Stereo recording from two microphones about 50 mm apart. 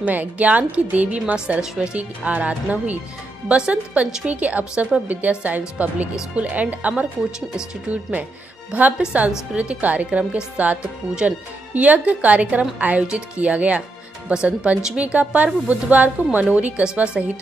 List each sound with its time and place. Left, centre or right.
0.0 s a woman's voice: right